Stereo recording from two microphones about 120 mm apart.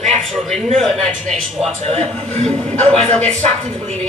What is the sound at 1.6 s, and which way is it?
A woman's voice, 60° right (ahead or behind).